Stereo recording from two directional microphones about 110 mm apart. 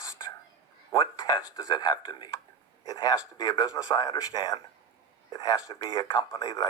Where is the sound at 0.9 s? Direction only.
40° left (ahead or behind).